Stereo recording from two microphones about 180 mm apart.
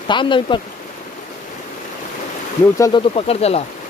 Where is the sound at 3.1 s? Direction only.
35° left (ahead or behind).